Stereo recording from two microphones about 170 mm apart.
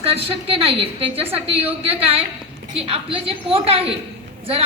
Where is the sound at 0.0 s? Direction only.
35° right (ahead or behind).